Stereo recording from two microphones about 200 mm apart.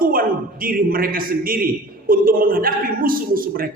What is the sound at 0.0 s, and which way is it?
A man's voice, 45° right (ahead or behind).